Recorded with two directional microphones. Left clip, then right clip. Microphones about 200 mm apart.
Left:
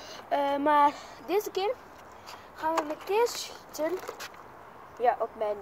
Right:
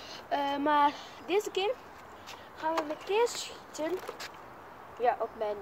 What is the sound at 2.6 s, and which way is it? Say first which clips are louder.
Speech: left 3 dB; 5° right (ahead or behind).